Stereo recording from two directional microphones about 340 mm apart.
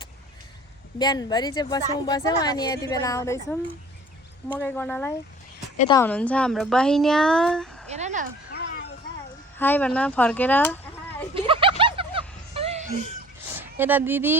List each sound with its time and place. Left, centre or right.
0.9 s a woman's voice: centre
5.7 s a woman's voice: centre
6.0 s speech: centre
7.9 s speech: centre
8.4 s a sound: left
9.6 s speech: centre
11.3 s a sound: centre
13.5 s speech: centre